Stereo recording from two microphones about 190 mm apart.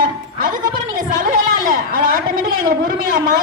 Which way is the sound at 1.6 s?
45° right (ahead or behind).